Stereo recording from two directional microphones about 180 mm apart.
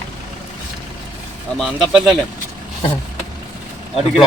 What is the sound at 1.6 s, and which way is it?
Speech, centre (ahead or behind).